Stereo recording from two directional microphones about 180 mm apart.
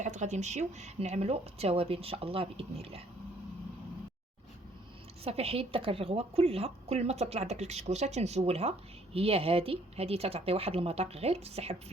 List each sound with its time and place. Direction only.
0.0 s a woman's voice: 40° right (ahead or behind)
5.2 s a woman's voice: 35° right (ahead or behind)